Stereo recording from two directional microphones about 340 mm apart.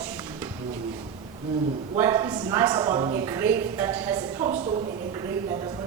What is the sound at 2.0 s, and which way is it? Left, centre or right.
A woman's voice, centre.